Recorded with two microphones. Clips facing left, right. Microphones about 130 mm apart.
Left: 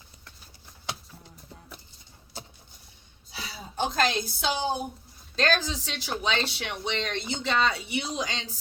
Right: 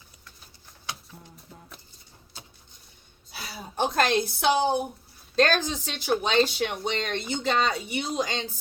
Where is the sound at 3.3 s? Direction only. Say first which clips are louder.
Right 1 dB; 55° right (ahead or behind).